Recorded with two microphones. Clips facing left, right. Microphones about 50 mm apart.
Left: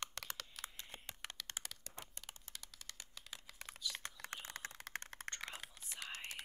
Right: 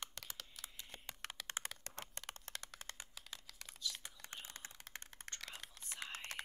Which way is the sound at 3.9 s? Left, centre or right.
Left.